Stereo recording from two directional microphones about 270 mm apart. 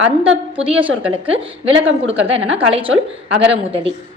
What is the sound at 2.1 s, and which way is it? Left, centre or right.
Speech, right.